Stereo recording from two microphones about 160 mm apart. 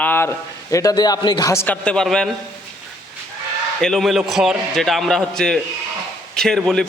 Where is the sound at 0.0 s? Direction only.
10° left (ahead or behind).